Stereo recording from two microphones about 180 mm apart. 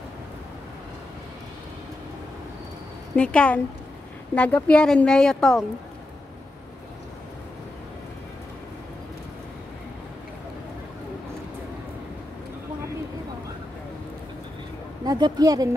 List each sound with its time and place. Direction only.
3.2 s speech: 5° left (ahead or behind)
15.0 s speech: 25° right (ahead or behind)